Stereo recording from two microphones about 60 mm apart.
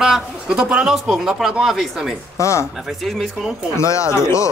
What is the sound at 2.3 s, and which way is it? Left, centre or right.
Speech, left.